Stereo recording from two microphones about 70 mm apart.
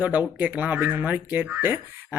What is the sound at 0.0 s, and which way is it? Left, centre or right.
A man's voice, right.